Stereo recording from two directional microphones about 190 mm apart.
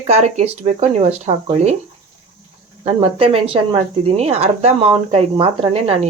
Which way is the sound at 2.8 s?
30° right (ahead or behind).